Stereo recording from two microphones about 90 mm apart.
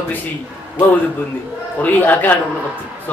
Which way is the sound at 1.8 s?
20° left (ahead or behind).